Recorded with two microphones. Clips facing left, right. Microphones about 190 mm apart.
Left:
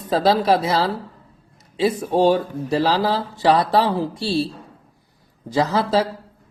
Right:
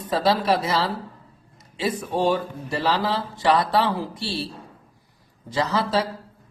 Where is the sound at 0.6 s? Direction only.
35° left (ahead or behind).